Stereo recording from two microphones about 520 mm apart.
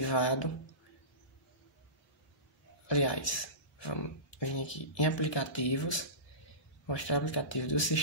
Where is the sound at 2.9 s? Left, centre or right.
Left.